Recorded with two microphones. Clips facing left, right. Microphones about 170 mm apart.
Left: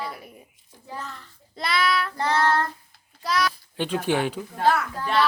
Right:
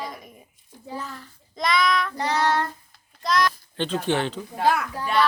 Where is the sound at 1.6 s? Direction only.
5° left (ahead or behind).